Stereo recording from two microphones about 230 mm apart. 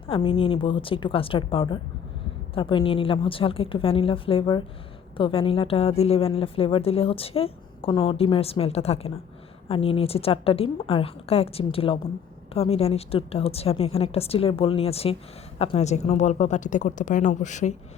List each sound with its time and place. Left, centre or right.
0.1 s a woman's voice: left